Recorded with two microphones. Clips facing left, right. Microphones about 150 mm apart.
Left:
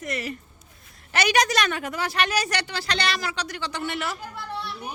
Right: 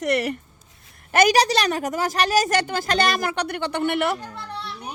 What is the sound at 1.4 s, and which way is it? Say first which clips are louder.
Speech: right 3 dB; 35° right (ahead or behind).